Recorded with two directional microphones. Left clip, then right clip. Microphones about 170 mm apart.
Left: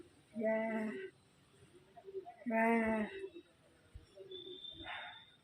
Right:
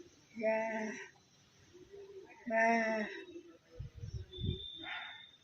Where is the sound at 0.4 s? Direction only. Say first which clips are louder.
Right 2 dB; 5° left (ahead or behind).